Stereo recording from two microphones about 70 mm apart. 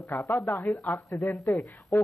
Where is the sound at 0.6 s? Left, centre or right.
Centre.